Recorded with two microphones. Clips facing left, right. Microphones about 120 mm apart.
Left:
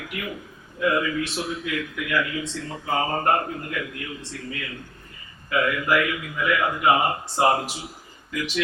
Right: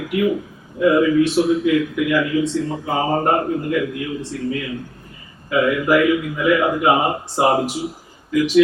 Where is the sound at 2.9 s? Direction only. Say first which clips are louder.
Right 4 dB; 15° right (ahead or behind).